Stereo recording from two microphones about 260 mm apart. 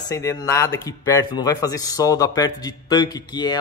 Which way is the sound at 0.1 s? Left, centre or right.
Centre.